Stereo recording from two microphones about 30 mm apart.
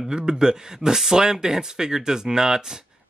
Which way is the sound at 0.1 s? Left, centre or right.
Right.